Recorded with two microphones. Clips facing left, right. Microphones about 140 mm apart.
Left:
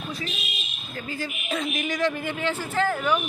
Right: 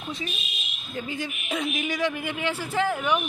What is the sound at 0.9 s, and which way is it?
A man's voice, 20° right (ahead or behind).